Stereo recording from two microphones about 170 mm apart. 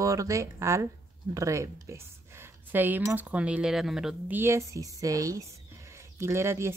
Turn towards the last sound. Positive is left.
turn(degrees=-15)  # may be behind; listen again after turning